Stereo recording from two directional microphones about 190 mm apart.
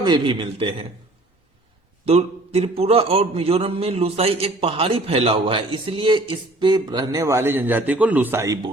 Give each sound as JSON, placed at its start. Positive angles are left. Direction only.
{"t": 0.0, "sound": "a man's voice", "side_deg": -25}
{"t": 2.0, "sound": "a man's voice", "side_deg": -30}